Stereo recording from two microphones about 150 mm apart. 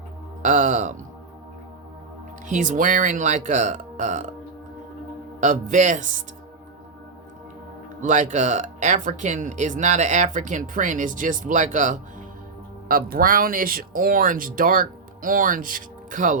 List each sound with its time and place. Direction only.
0.4 s speech: 55° right (ahead or behind)
2.5 s speech: 60° right (ahead or behind)
5.4 s speech: 55° right (ahead or behind)
8.0 s speech: 55° right (ahead or behind)
12.9 s speech: 75° right (ahead or behind); by 16.4 s 60° right (ahead or behind)